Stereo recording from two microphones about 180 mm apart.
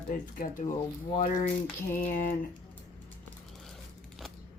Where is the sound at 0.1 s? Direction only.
50° left (ahead or behind).